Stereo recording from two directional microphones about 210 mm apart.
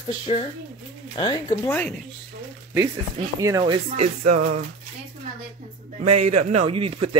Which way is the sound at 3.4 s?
20° right (ahead or behind).